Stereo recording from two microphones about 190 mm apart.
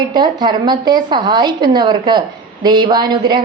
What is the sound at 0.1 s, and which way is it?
A woman's voice, 20° right (ahead or behind).